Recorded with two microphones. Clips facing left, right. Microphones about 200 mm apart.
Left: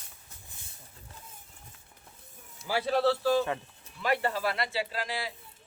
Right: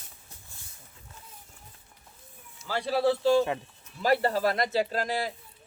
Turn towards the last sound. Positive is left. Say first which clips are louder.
# right 6 dB
turn(degrees=-45)  # may be behind; listen again after turning